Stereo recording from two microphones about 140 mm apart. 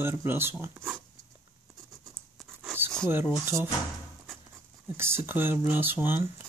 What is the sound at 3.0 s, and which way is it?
Speech, 15° right (ahead or behind).